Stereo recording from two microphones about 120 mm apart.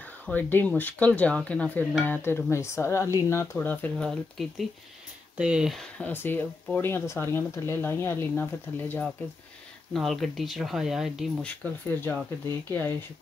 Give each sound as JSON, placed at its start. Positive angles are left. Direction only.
{"t": 0.3, "sound": "speech", "side_deg": 15}
{"t": 6.1, "sound": "speech", "side_deg": 15}
{"t": 9.9, "sound": "speech", "side_deg": 0}
{"t": 11.4, "sound": "speech", "side_deg": 15}